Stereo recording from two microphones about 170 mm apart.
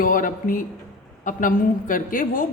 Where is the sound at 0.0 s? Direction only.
55° left (ahead or behind).